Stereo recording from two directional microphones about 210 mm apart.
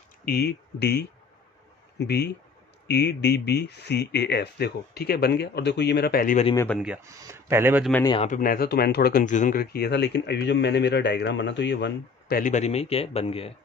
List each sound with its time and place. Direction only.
0.2 s speech: 50° left (ahead or behind)
7.1 s speech: 15° right (ahead or behind)
7.9 s a man's voice: 15° left (ahead or behind)
8.2 s speech: 40° left (ahead or behind)